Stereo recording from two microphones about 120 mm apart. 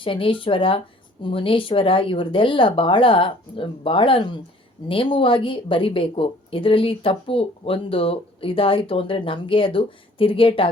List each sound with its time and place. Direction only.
0.0 s a woman's voice: 45° left (ahead or behind)